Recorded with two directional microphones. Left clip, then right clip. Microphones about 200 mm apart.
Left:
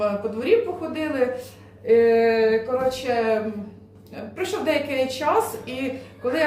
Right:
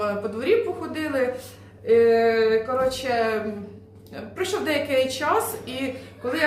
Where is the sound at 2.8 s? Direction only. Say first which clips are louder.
Left 1 dB; 20° right (ahead or behind).